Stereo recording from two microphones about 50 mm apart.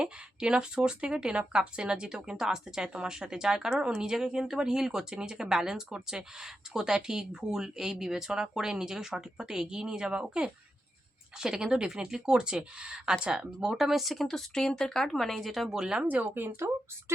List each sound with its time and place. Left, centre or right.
0.0 s speech: centre
15.7 s speech: centre
16.1 s speech: right